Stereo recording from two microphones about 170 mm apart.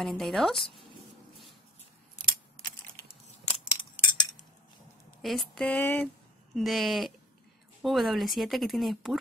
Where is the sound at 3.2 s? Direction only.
35° left (ahead or behind).